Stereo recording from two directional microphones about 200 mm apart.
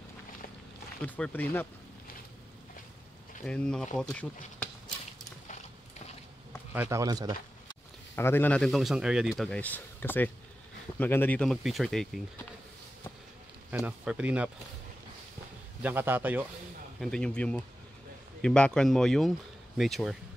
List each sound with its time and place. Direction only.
1.0 s speech: 10° left (ahead or behind)
3.4 s speech: 5° left (ahead or behind)
6.7 s speech: 10° right (ahead or behind)
8.2 s speech: 10° left (ahead or behind)
13.7 s speech: 5° right (ahead or behind)
15.8 s speech: 10° right (ahead or behind)
17.0 s speech: 5° left (ahead or behind)